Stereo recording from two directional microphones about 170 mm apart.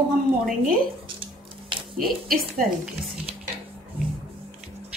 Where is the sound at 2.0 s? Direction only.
55° right (ahead or behind).